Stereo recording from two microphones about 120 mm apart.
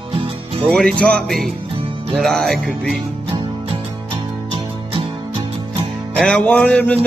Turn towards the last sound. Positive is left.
turn(degrees=10)  # may be behind; listen again after turning